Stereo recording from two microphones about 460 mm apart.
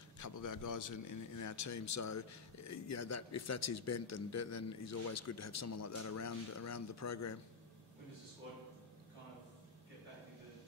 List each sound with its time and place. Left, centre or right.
0.2 s a man's voice: left